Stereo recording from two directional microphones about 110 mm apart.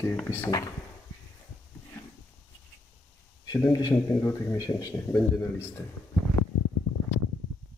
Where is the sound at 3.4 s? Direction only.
40° left (ahead or behind).